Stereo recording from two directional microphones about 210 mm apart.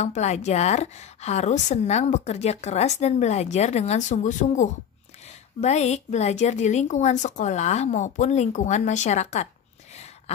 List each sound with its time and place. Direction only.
0.0 s a woman's voice: 30° left (ahead or behind)